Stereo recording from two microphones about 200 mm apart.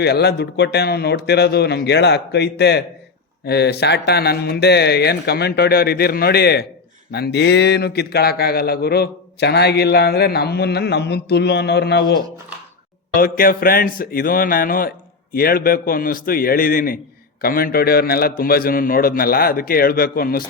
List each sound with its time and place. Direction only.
0.0 s a man's voice: 55° left (ahead or behind)
13.1 s a man's voice: 45° left (ahead or behind)